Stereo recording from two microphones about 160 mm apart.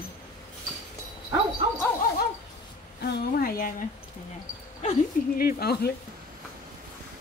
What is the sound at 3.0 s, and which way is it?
Speech, 65° left (ahead or behind).